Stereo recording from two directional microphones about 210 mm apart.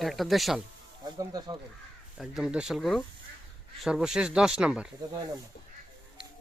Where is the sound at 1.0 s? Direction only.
20° right (ahead or behind).